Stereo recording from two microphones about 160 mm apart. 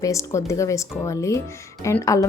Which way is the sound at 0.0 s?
20° left (ahead or behind).